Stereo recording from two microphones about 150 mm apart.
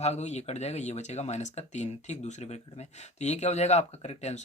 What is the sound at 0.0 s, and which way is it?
Speech, 50° left (ahead or behind).